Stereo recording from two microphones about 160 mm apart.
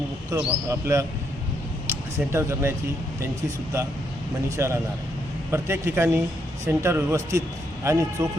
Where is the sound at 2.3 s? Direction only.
15° right (ahead or behind).